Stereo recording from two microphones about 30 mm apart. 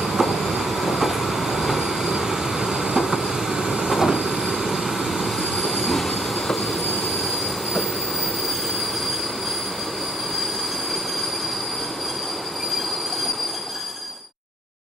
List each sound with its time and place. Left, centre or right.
0.0 s train: centre
2.0 s train: centre
3.1 s vehicle: centre
3.9 s train: centre